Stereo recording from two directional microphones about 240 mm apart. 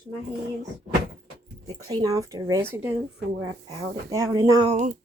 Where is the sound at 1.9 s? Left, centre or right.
Centre.